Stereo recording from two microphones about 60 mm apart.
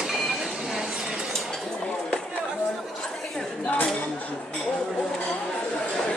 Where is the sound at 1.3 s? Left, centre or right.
Centre.